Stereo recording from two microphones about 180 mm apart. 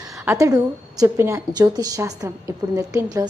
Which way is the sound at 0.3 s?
15° right (ahead or behind).